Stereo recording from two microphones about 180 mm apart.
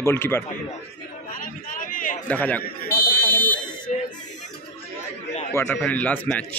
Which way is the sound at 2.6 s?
55° left (ahead or behind).